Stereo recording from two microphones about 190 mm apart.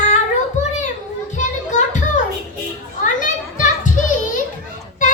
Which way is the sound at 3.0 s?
45° left (ahead or behind).